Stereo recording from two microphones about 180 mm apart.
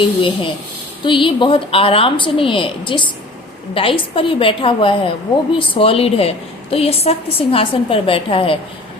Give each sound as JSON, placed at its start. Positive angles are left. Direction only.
{"t": 0.2, "sound": "a woman's voice", "side_deg": 30}